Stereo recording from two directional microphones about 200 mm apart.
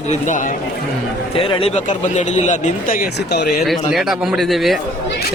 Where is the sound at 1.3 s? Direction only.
30° left (ahead or behind); by 3.4 s 55° left (ahead or behind).